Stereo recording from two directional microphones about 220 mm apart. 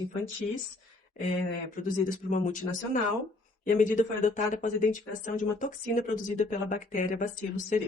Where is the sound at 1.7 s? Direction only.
35° left (ahead or behind).